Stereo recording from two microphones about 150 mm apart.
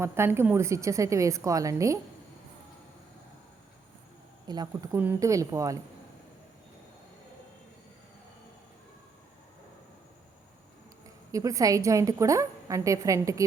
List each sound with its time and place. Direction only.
0.0 s a woman's voice: 15° right (ahead or behind)
4.4 s a woman's voice: 25° right (ahead or behind)
11.3 s a woman's voice: 20° right (ahead or behind)